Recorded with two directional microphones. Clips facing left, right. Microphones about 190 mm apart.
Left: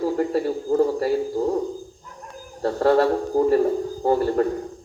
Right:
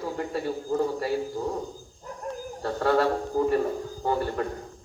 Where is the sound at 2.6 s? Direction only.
35° left (ahead or behind).